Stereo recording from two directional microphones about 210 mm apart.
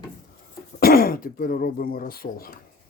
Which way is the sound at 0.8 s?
45° left (ahead or behind).